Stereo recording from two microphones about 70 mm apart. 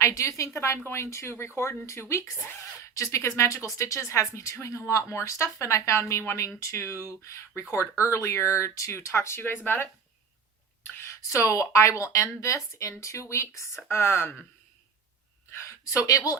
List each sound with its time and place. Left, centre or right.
0.0 s speech: left
10.8 s speech: left
15.4 s a sound: left
15.8 s speech: left